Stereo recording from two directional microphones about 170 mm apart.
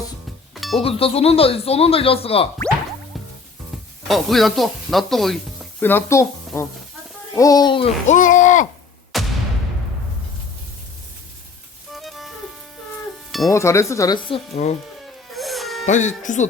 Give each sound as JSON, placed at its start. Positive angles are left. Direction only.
{"t": 0.5, "sound": "music", "side_deg": 0}
{"t": 0.8, "sound": "speech", "side_deg": 35}
{"t": 4.1, "sound": "speech", "side_deg": 0}
{"t": 5.8, "sound": "speech", "side_deg": 15}
{"t": 9.1, "sound": "artillery fire", "side_deg": 0}
{"t": 11.9, "sound": "music", "side_deg": 0}
{"t": 13.5, "sound": "speech", "side_deg": 15}
{"t": 14.3, "sound": "speech", "side_deg": 35}
{"t": 15.3, "sound": "insect", "side_deg": 0}
{"t": 15.9, "sound": "speech", "side_deg": 45}